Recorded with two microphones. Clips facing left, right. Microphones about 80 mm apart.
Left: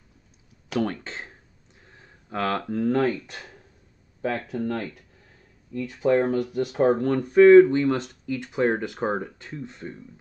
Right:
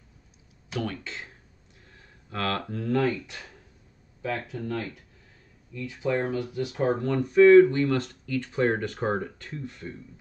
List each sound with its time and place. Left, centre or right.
0.7 s speech: left
1.9 s speech: left
4.5 s speech: left